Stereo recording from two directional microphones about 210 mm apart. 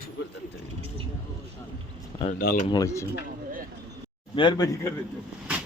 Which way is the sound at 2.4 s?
45° left (ahead or behind).